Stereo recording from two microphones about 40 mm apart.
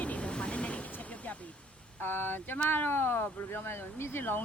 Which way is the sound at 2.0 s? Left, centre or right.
Left.